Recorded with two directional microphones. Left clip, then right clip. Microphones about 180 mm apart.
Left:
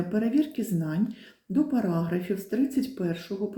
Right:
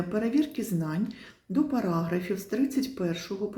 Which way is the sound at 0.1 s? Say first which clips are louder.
Left 1 dB; 10° right (ahead or behind).